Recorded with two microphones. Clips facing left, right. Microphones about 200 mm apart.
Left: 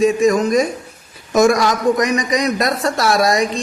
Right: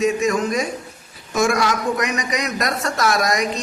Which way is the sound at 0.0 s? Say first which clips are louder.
Left 5 dB; 35° left (ahead or behind).